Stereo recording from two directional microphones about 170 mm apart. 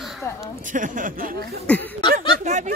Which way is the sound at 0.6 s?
50° right (ahead or behind).